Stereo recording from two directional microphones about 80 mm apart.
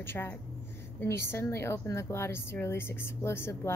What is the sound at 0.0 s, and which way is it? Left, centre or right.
A woman's voice, left.